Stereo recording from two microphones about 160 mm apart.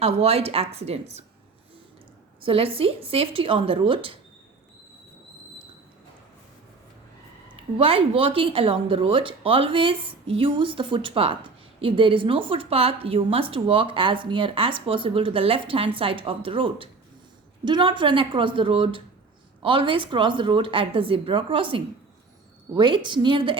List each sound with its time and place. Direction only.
0.0 s a woman's voice: 40° right (ahead or behind)
2.4 s a woman's voice: 35° right (ahead or behind)
7.4 s a woman's voice: 35° right (ahead or behind)